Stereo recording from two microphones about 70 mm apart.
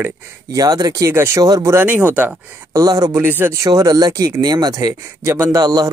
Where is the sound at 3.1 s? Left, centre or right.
Right.